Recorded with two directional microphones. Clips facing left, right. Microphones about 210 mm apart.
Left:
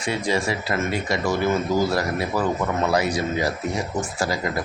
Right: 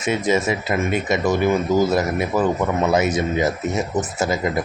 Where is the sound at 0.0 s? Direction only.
20° right (ahead or behind).